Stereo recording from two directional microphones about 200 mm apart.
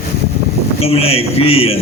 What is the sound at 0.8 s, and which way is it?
Speech, 30° left (ahead or behind).